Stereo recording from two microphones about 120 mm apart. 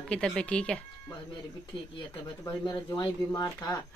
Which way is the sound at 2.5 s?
40° left (ahead or behind).